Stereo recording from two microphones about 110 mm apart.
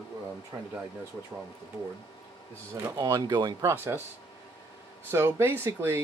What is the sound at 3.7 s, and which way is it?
Speech, 20° right (ahead or behind).